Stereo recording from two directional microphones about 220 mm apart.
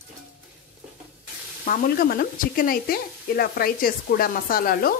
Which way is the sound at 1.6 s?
40° left (ahead or behind).